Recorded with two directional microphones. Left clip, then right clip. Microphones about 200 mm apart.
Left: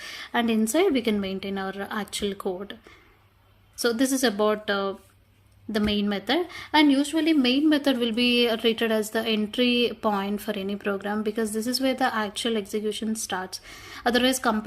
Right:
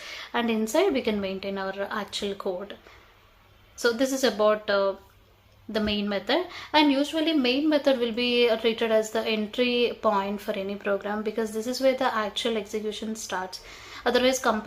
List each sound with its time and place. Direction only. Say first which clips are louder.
0.0 s a sound: left 2 dB; 40° left (ahead or behind)
0.7 s a woman's voice: even; 40° left (ahead or behind)
3.8 s a woman's voice: even; 40° left (ahead or behind)